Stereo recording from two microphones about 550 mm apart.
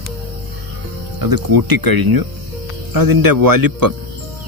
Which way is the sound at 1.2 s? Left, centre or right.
Right.